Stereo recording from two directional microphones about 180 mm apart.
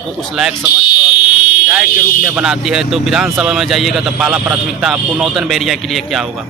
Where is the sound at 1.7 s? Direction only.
5° right (ahead or behind).